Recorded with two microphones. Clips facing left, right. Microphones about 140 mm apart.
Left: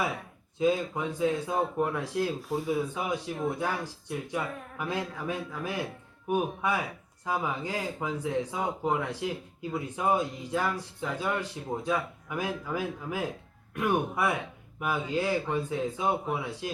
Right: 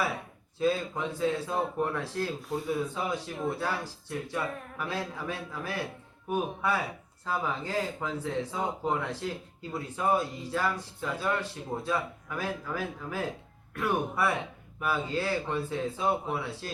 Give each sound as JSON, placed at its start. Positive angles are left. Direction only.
{"t": 0.6, "sound": "speech", "side_deg": 15}
{"t": 2.4, "sound": "speech", "side_deg": 0}
{"t": 3.3, "sound": "speech", "side_deg": 15}